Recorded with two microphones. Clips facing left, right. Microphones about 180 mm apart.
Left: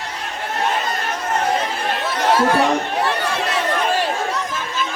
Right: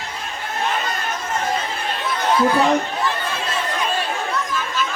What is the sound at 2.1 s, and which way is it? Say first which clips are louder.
Chatter: left 1 dB; 80° left.